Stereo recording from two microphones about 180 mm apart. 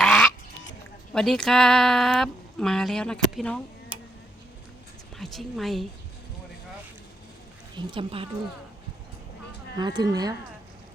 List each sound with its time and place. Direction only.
0.0 s goose: centre (ahead or behind)
1.1 s speech: 5° left (ahead or behind)
5.1 s speech: centre (ahead or behind)
7.8 s speech: 25° right (ahead or behind)
9.7 s speech: 25° right (ahead or behind)